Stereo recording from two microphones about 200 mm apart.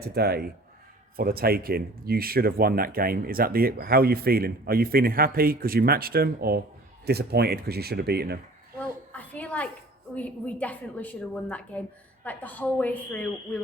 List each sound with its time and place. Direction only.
0.1 s speech: 50° right (ahead or behind)
9.1 s a sound: 5° left (ahead or behind)
10.2 s a woman's voice: 5° left (ahead or behind)